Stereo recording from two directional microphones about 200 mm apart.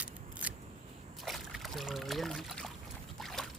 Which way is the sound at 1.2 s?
Centre (ahead or behind).